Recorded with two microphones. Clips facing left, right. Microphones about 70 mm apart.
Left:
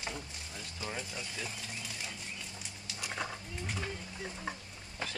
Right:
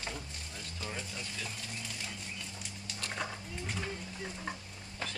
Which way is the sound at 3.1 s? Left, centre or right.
Centre.